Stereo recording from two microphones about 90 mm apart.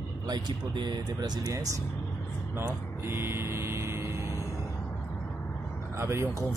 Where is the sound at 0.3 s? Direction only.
55° right (ahead or behind); by 1.8 s 40° right (ahead or behind).